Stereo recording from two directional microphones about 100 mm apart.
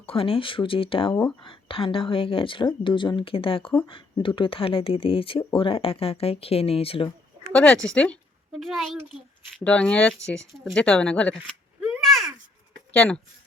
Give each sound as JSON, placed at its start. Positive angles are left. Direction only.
{"t": 0.0, "sound": "speech", "side_deg": 65}
{"t": 7.5, "sound": "speech", "side_deg": 10}
{"t": 8.5, "sound": "a woman's voice", "side_deg": 0}
{"t": 9.6, "sound": "speech", "side_deg": 10}
{"t": 12.9, "sound": "speech", "side_deg": 10}